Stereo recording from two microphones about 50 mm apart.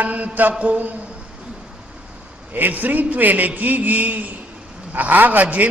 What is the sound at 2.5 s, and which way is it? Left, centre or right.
Mantra, right.